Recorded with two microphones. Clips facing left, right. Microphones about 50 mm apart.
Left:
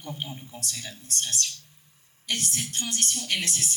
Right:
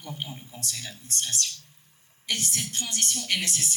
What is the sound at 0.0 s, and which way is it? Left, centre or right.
Speech, left.